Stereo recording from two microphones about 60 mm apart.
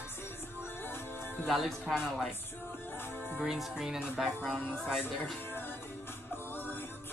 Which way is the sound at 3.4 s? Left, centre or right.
Centre.